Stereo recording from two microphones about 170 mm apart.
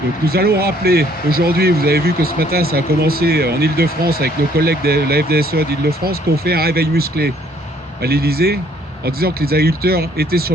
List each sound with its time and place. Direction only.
0.3 s speech: 65° right (ahead or behind)